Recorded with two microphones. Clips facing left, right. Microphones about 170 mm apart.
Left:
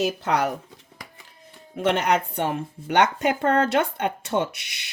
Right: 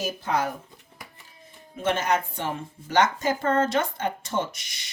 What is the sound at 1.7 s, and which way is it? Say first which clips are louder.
Speech: left 3 dB; 65° left (ahead or behind).